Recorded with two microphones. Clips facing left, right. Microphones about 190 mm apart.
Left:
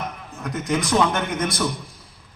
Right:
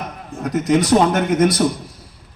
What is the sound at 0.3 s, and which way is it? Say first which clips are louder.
A man's voice: right 8 dB; 40° right (ahead or behind).